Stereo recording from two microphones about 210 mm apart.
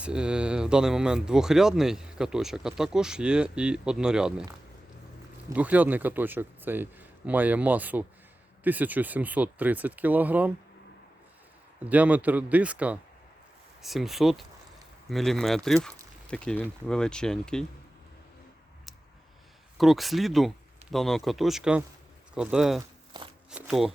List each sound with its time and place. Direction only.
0.0 s speech: 5° right (ahead or behind)
5.5 s a man's voice: 5° right (ahead or behind)
11.9 s a man's voice: 5° right (ahead or behind)
19.8 s speech: centre (ahead or behind)
23.1 s shuffling cards: 20° right (ahead or behind)
23.5 s speech: 5° right (ahead or behind)